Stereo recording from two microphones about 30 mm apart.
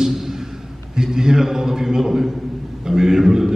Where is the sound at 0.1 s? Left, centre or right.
Centre.